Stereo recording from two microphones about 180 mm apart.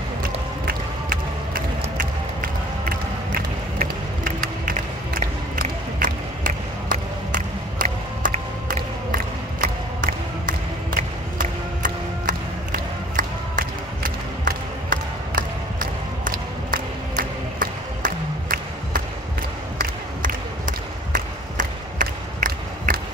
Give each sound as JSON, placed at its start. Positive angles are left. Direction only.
{"t": 0.2, "sound": "mechanisms", "side_deg": -55}
{"t": 2.0, "sound": "crowd", "side_deg": -50}
{"t": 3.8, "sound": "mechanisms", "side_deg": -55}
{"t": 5.6, "sound": "crowd", "side_deg": -50}
{"t": 11.4, "sound": "music", "side_deg": -45}
{"t": 19.8, "sound": "a sound", "side_deg": -50}